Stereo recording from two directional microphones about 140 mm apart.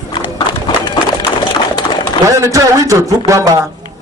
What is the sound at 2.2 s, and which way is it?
A man's voice, 20° right (ahead or behind).